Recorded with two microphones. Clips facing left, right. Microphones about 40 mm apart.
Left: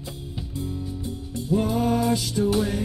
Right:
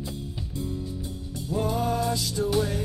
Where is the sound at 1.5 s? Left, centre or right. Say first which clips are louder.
Left 4 dB; centre.